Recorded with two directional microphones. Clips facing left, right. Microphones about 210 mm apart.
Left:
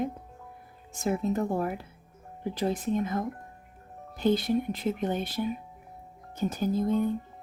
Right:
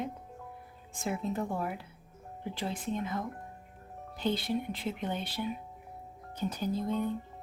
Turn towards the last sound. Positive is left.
turn(degrees=45)  # may be behind; listen again after turning